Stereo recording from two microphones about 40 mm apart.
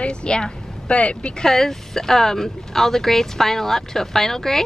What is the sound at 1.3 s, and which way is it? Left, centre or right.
Speech, centre.